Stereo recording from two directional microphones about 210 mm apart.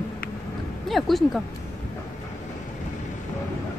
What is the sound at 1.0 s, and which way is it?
Speech, centre (ahead or behind).